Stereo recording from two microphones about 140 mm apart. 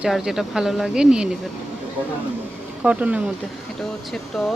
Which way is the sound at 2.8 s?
10° right (ahead or behind).